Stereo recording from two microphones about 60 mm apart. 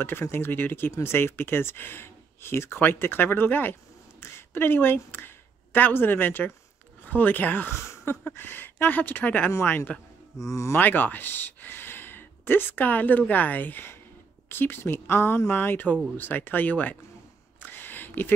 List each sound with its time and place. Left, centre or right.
0.0 s speech: left
7.7 s speech: left
17.6 s a sound: left